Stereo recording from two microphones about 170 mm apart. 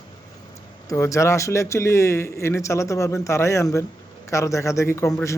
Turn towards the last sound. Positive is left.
turn(degrees=15)  # may be behind; listen again after turning